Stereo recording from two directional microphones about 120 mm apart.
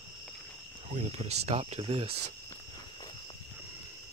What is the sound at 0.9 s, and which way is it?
Speech, 55° right (ahead or behind).